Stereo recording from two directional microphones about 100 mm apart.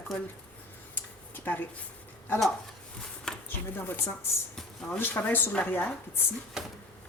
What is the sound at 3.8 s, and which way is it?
Speech, 20° left (ahead or behind).